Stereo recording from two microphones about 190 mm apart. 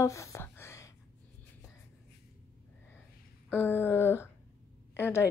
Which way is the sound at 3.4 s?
10° left (ahead or behind).